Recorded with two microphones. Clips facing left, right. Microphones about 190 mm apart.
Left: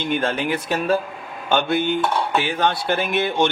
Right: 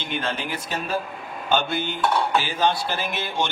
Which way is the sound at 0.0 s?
50° left (ahead or behind).